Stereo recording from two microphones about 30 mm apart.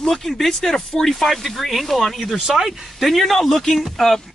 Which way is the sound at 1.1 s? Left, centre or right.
Centre.